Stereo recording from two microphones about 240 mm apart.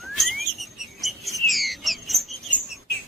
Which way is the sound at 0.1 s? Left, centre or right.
Centre.